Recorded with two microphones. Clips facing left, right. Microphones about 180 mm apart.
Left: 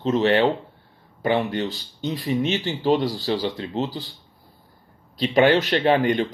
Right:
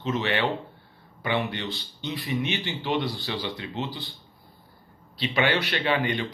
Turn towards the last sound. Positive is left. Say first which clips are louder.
# left 7 dB
turn(degrees=45)  # may be behind; listen again after turning